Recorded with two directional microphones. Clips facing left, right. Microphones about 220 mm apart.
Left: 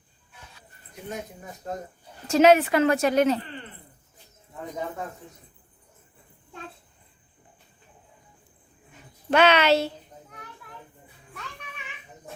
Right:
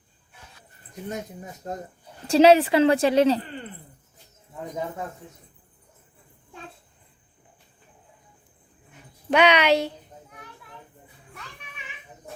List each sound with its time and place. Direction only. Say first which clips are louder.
2.2 s a woman's voice: right 2 dB; 30° right (ahead or behind)
9.3 s a woman's voice: even; 15° right (ahead or behind)